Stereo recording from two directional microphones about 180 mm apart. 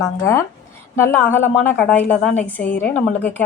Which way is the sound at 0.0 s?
15° left (ahead or behind).